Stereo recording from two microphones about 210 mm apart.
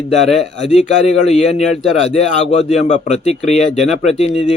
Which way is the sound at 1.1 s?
30° left (ahead or behind).